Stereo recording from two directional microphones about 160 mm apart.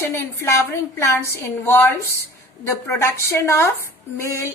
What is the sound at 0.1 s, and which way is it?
A woman's voice, 15° left (ahead or behind).